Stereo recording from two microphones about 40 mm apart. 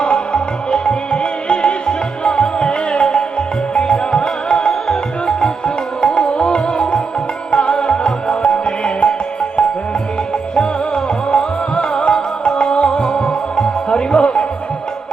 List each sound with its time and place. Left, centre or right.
0.0 s music: left
10.5 s music: left